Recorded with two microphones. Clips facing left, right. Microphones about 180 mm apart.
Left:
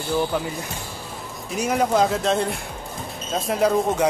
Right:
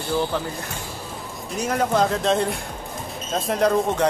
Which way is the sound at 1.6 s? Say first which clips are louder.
Left 1 dB; 10° left (ahead or behind).